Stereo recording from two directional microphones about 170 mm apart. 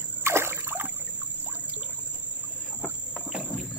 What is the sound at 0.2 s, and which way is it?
Rowboat, 15° right (ahead or behind).